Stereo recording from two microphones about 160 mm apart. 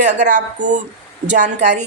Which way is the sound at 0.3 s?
50° right (ahead or behind).